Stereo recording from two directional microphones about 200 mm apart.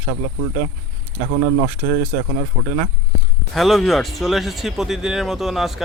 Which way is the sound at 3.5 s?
Centre (ahead or behind).